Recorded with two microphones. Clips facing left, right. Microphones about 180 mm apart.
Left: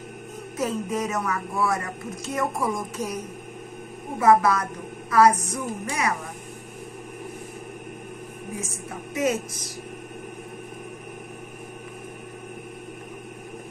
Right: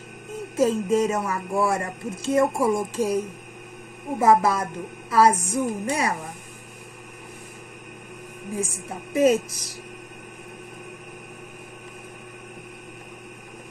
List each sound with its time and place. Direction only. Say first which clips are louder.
0.6 s a woman's voice: right 6 dB; 30° right (ahead or behind)
4.2 s a woman's voice: even; 30° right (ahead or behind)
8.5 s a woman's voice: right 6 dB; 30° right (ahead or behind)